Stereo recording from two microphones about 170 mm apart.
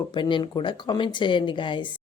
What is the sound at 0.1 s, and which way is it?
Speech, 30° left (ahead or behind).